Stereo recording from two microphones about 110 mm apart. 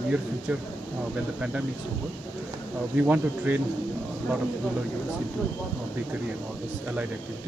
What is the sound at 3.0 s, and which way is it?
Speech, 15° right (ahead or behind).